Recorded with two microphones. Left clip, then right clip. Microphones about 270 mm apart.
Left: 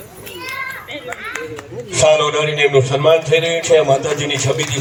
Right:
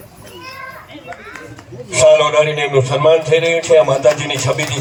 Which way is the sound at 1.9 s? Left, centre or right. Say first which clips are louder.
Right 3 dB; centre.